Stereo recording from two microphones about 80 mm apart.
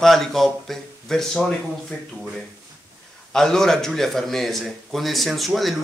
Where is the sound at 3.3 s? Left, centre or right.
Centre.